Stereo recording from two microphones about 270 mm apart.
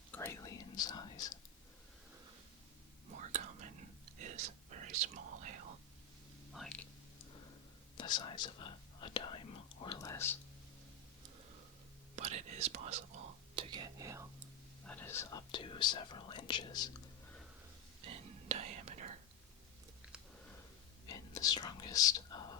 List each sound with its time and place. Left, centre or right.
0.1 s whispering: centre
3.2 s whispering: right
6.5 s whispering: centre
7.9 s whispering: centre
12.1 s whispering: right
14.8 s whispering: centre
18.0 s whispering: right
21.1 s whispering: centre